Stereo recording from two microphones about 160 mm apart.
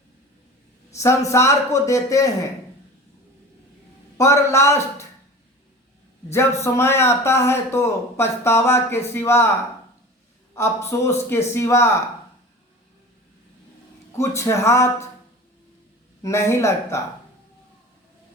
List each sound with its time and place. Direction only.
0.9 s a man's voice: 20° left (ahead or behind)
4.2 s a man's voice: 20° left (ahead or behind)
6.3 s a man's voice: 15° left (ahead or behind)
10.5 s a man's voice: 15° left (ahead or behind)
14.1 s a man's voice: 15° left (ahead or behind)
16.2 s a man's voice: 15° left (ahead or behind)